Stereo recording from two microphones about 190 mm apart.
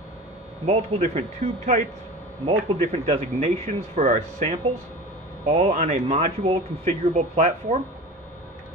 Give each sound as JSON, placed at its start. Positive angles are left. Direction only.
{"t": 0.7, "sound": "speech", "side_deg": -35}